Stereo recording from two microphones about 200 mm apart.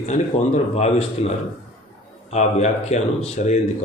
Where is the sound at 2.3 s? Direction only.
35° left (ahead or behind).